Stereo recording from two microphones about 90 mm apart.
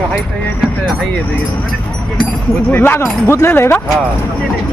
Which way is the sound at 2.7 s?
25° left (ahead or behind).